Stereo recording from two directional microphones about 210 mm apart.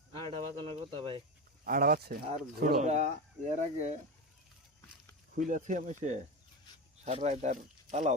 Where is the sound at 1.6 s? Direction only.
45° right (ahead or behind).